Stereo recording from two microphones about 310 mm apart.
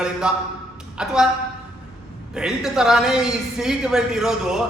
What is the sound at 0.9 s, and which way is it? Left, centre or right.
Speech, centre.